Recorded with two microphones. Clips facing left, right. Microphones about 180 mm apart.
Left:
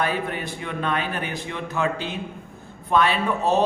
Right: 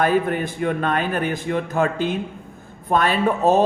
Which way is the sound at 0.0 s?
50° right (ahead or behind).